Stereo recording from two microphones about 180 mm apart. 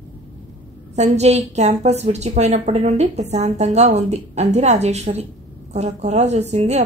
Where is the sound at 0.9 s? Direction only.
40° right (ahead or behind).